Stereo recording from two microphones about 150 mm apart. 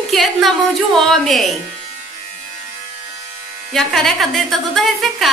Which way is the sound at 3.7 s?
Centre (ahead or behind).